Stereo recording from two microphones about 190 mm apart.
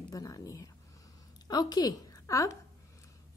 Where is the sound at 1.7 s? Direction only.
20° left (ahead or behind).